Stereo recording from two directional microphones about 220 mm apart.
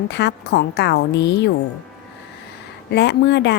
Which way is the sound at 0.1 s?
50° left (ahead or behind).